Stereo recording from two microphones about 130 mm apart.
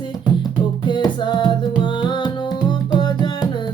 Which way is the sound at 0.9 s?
35° left (ahead or behind).